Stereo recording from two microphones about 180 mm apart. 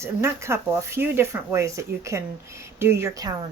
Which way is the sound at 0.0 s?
15° right (ahead or behind).